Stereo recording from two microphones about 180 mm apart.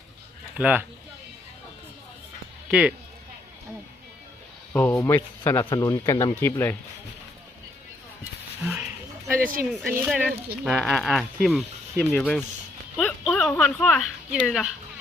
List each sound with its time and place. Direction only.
0.5 s speech: 10° right (ahead or behind)
2.6 s speech: 5° right (ahead or behind)
4.7 s speech: 10° left (ahead or behind)
9.3 s speech: 50° right (ahead or behind)
10.1 s speech: 5° right (ahead or behind)